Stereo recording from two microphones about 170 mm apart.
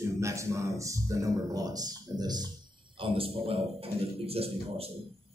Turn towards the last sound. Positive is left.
turn(degrees=-35)  # may be behind; listen again after turning